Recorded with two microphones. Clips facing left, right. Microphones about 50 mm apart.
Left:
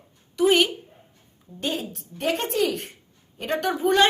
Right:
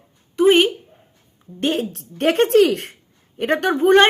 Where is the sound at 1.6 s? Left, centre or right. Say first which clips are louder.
Right 7 dB; right.